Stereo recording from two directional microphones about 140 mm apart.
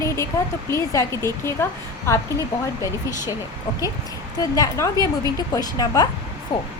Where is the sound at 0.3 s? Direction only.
25° left (ahead or behind).